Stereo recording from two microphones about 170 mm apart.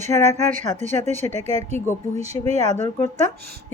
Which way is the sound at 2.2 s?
40° right (ahead or behind).